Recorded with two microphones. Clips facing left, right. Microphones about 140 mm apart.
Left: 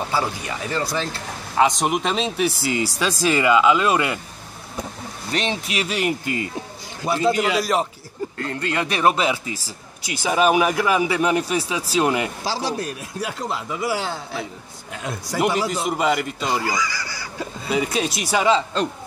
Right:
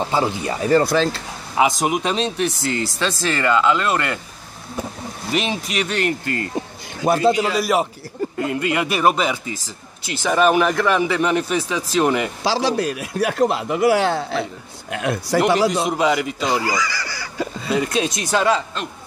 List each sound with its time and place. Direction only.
0.1 s speech: 20° right (ahead or behind)
0.5 s speech: 45° right (ahead or behind)
1.6 s speech: 5° right (ahead or behind)
5.3 s speech: 5° right (ahead or behind); by 6.5 s 10° left (ahead or behind)
7.0 s a man's voice: 55° right (ahead or behind)
7.5 s a man's voice: 5° right (ahead or behind)
12.4 s speech: 90° right
16.0 s speech: centre (ahead or behind)
16.6 s goose: 75° right (ahead or behind)
17.6 s speech: 5° left (ahead or behind)